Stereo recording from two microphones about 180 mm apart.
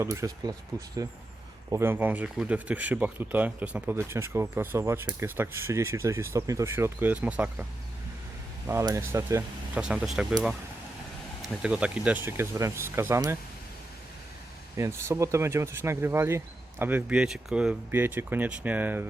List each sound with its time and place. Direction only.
0.0 s speech: 15° right (ahead or behind)
11.4 s speech: 5° right (ahead or behind)
14.8 s speech: 15° right (ahead or behind)